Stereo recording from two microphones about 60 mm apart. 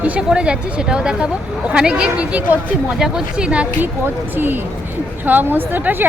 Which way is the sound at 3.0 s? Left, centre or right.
Centre.